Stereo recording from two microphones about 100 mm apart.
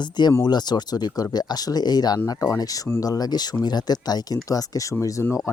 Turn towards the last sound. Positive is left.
turn(degrees=30)  # may be behind; listen again after turning